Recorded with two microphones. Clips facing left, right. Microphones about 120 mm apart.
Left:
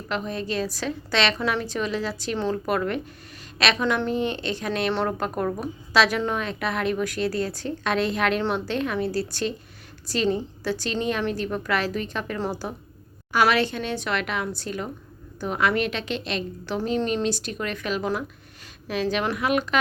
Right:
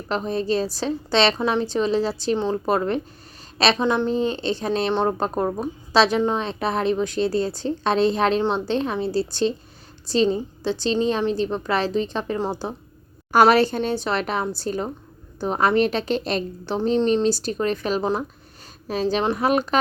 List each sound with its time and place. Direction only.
0.1 s a woman's voice: 35° right (ahead or behind)
13.3 s a woman's voice: 40° right (ahead or behind)